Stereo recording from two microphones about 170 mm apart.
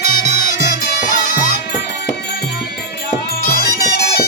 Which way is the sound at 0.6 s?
50° left (ahead or behind).